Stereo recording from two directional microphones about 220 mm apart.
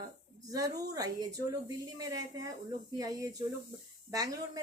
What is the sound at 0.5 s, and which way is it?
Speech, 15° right (ahead or behind).